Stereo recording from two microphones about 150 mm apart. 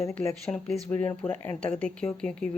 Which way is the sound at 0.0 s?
15° left (ahead or behind).